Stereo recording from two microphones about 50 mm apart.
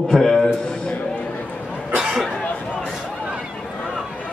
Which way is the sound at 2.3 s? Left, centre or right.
Centre.